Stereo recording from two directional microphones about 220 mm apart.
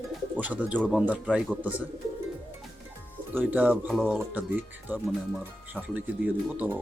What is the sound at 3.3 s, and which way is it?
Speech, 10° right (ahead or behind).